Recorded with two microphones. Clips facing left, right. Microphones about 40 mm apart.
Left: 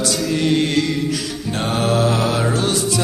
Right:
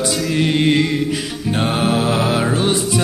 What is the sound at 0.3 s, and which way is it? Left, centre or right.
Music, right.